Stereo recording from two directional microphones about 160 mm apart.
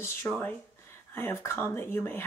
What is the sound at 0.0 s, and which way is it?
Speech, 15° left (ahead or behind).